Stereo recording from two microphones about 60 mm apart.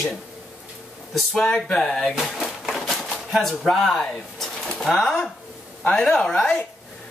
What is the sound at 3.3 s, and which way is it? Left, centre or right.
Speech, centre.